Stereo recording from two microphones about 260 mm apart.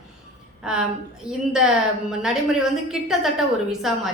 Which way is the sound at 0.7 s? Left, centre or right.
Centre.